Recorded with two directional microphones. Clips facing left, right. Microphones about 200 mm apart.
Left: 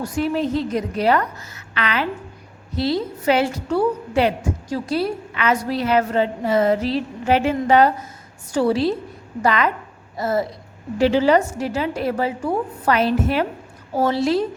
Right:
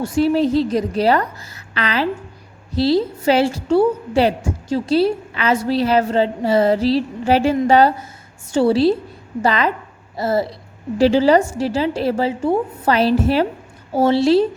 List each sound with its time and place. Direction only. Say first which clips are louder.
0.0 s a woman's voice: right 5 dB; 30° right (ahead or behind)